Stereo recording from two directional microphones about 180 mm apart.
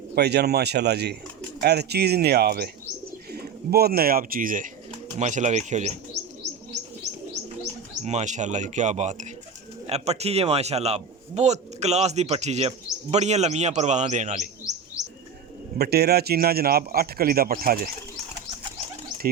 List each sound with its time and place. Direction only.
0.2 s a man's voice: 65° right (ahead or behind); by 5.9 s 40° right (ahead or behind)
8.0 s a man's voice: 40° right (ahead or behind)
15.0 s bird: 15° left (ahead or behind)
15.8 s a man's voice: 60° right (ahead or behind)